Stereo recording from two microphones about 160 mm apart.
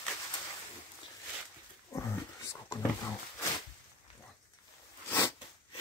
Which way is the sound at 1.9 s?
20° left (ahead or behind).